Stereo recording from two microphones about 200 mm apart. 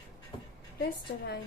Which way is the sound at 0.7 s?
50° left (ahead or behind).